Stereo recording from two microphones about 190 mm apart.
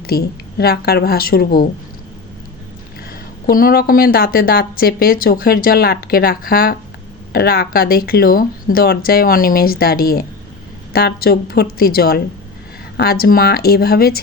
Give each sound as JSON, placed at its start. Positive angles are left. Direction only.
{"t": 0.1, "sound": "speech", "side_deg": 55}
{"t": 3.4, "sound": "speech", "side_deg": 50}